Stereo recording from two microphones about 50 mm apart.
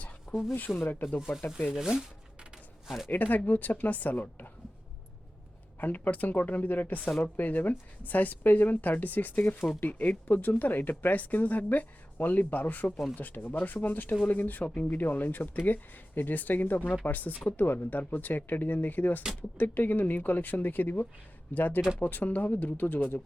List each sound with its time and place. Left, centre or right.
0.3 s speech: centre
1.7 s shuffling cards: centre
3.1 s speech: left
5.8 s speech: left